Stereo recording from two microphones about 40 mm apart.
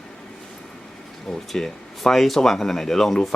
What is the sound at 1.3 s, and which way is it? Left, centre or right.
Speech, centre.